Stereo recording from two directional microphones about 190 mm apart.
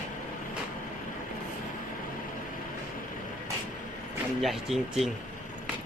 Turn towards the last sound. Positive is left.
turn(degrees=0)  # may be behind; listen again after turning